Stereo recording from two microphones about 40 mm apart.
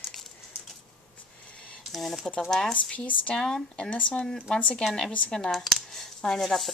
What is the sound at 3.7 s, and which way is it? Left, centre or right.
Speech, left.